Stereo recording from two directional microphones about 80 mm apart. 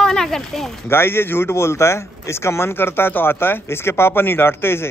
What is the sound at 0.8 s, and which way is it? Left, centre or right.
A man's voice, left.